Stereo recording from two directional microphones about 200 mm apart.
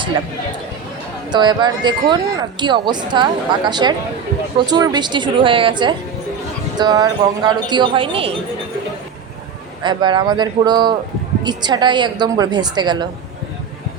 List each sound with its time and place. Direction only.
1.3 s speech: 20° right (ahead or behind)
9.8 s speech: 25° right (ahead or behind)